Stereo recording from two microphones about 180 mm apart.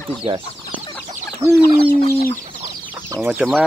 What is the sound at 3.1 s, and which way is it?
Speech, 10° right (ahead or behind).